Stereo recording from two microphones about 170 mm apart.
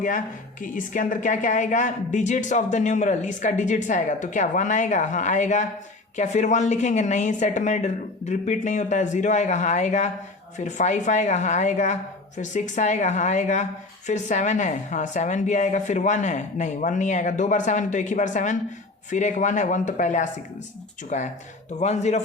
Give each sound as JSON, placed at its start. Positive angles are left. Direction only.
{"t": 0.6, "sound": "a woman's voice", "side_deg": 50}